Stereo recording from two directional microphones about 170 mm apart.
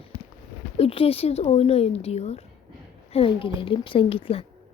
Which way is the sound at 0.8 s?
35° left (ahead or behind).